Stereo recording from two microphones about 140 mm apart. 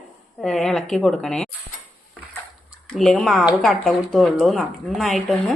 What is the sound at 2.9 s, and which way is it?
A woman's voice, 5° left (ahead or behind).